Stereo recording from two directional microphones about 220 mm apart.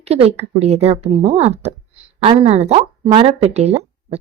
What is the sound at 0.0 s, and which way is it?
Speech, 30° right (ahead or behind).